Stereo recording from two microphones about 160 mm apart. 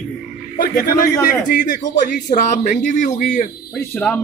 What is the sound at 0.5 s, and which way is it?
Speech, 65° left (ahead or behind).